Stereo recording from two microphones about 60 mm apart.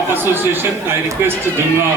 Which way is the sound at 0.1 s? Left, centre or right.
Right.